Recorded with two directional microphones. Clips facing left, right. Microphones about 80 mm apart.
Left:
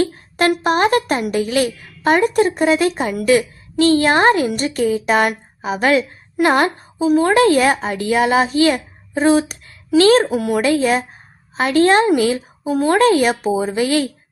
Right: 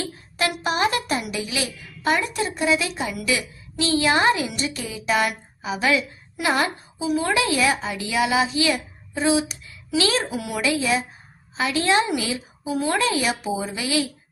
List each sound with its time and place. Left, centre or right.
0.0 s a woman's voice: left